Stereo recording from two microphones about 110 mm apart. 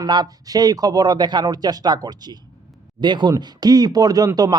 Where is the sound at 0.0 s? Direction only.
35° right (ahead or behind).